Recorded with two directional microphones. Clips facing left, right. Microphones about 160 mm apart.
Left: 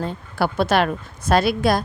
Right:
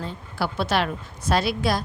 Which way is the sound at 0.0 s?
50° left (ahead or behind).